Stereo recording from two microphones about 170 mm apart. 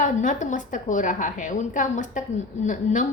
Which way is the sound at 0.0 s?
45° left (ahead or behind).